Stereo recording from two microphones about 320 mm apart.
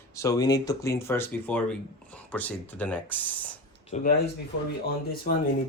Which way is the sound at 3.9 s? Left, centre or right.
Left.